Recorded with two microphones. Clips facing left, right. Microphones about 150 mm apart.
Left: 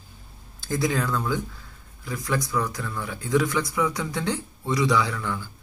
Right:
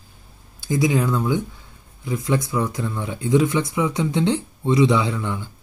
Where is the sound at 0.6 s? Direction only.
20° right (ahead or behind).